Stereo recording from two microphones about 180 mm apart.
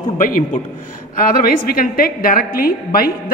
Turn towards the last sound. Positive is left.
turn(degrees=55)  # may be behind; listen again after turning